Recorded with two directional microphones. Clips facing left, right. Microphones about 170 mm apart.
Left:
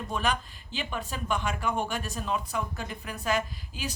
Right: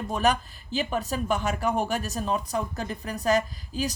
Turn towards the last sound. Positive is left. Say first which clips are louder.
# right 7 dB
turn(degrees=-40)  # may be behind; listen again after turning